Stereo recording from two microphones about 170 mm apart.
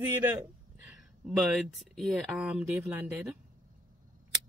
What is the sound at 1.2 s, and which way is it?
Speech, centre (ahead or behind).